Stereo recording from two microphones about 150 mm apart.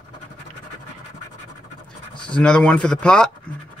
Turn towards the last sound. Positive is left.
turn(degrees=5)  # may be behind; listen again after turning